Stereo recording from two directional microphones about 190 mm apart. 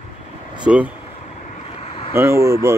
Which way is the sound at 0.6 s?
5° right (ahead or behind).